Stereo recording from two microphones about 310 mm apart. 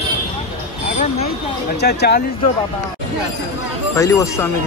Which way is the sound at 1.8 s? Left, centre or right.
Left.